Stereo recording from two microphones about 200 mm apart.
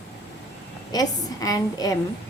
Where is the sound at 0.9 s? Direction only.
20° left (ahead or behind).